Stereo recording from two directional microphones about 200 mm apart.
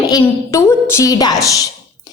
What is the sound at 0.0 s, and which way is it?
A woman's voice, 15° left (ahead or behind).